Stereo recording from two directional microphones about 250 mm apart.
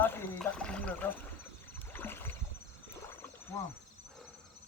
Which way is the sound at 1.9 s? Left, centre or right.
Centre.